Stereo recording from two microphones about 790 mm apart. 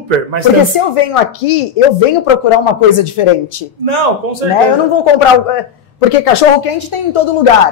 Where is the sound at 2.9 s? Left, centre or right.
Left.